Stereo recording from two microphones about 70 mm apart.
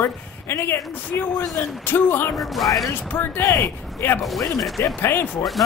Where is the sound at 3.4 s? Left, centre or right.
Left.